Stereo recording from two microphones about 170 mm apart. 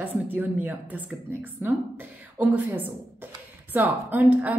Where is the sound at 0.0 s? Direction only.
10° right (ahead or behind).